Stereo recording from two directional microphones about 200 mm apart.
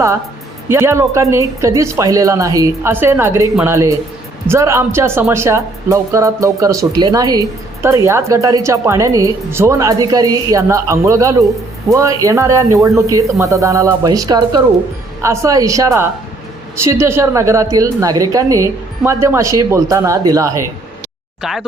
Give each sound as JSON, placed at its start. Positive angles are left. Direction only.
{"t": 0.7, "sound": "speech", "side_deg": -15}
{"t": 21.4, "sound": "speech", "side_deg": -5}